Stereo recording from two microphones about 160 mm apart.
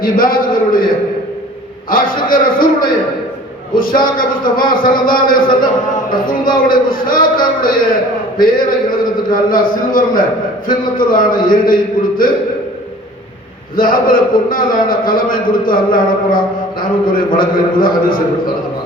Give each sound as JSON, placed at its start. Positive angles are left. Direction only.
{"t": 0.0, "sound": "a sound", "side_deg": 60}
{"t": 1.9, "sound": "a man's voice", "side_deg": 60}
{"t": 4.0, "sound": "a man's voice", "side_deg": 60}
{"t": 6.7, "sound": "a man's voice", "side_deg": 60}
{"t": 13.7, "sound": "a man's voice", "side_deg": 60}